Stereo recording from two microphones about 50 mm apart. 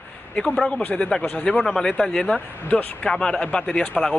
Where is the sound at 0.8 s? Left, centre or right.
Left.